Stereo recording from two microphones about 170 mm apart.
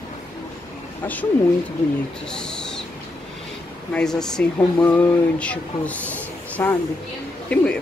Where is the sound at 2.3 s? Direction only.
5° left (ahead or behind).